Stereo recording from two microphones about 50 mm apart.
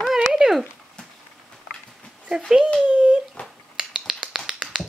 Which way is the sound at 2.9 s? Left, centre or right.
Right.